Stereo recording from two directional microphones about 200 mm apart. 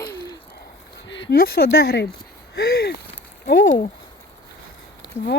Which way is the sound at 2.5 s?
55° left (ahead or behind).